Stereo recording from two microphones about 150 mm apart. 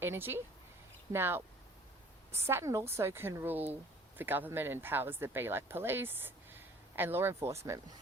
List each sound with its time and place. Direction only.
0.0 s a woman's voice: 15° right (ahead or behind)